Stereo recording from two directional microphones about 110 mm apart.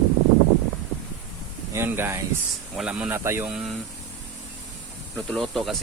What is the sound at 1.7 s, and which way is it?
Speech, 20° right (ahead or behind).